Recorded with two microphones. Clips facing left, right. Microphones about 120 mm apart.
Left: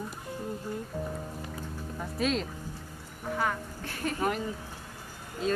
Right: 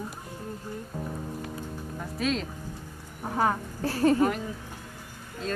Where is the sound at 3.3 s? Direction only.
35° right (ahead or behind).